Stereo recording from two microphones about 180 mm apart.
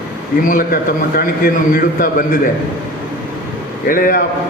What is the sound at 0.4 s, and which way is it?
A man's voice, 55° left (ahead or behind).